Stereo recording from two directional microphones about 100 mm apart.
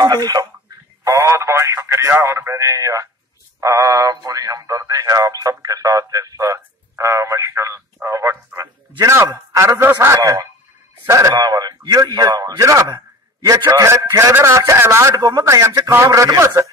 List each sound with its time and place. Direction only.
0.0 s speech: 40° right (ahead or behind)
1.0 s a man's voice: 30° right (ahead or behind)
10.1 s a man's voice: 35° right (ahead or behind)
15.1 s a man's voice: 35° right (ahead or behind)